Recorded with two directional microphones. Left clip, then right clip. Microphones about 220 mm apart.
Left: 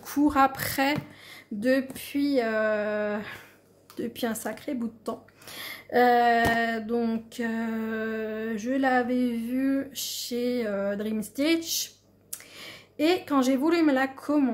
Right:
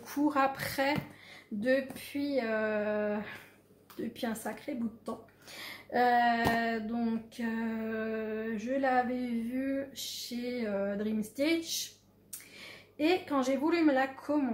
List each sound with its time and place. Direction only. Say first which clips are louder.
0.0 s a woman's voice: left 7 dB; 45° left (ahead or behind)